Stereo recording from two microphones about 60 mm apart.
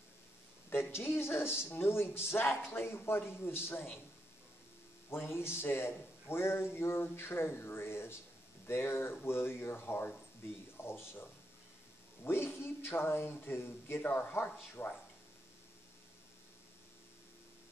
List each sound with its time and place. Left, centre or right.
0.9 s a man's voice: left
5.1 s a man's voice: left
12.3 s speech: left